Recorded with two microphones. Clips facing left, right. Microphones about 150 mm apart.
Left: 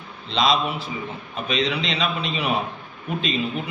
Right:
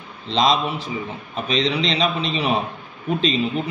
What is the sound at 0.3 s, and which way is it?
A man's voice, 35° right (ahead or behind).